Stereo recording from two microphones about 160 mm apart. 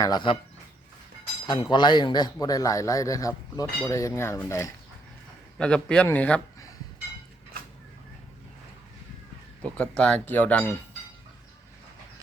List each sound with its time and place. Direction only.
0.0 s a man's voice: 25° left (ahead or behind)
1.7 s a man's voice: 25° left (ahead or behind)
5.5 s a man's voice: 5° left (ahead or behind)
9.6 s speech: 5° left (ahead or behind)